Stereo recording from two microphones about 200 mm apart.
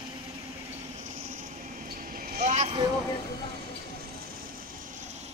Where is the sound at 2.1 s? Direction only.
45° right (ahead or behind).